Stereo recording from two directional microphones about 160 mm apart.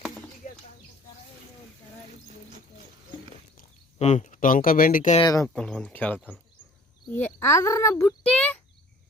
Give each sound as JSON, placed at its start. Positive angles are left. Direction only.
{"t": 0.0, "sound": "a sound", "side_deg": 0}
{"t": 3.9, "sound": "speech", "side_deg": 45}
{"t": 5.2, "sound": "speech", "side_deg": 20}
{"t": 5.5, "sound": "speech", "side_deg": 5}
{"t": 8.2, "sound": "a child's voice", "side_deg": 5}